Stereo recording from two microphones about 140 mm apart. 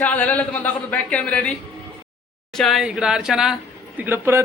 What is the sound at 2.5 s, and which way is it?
Speech, centre (ahead or behind).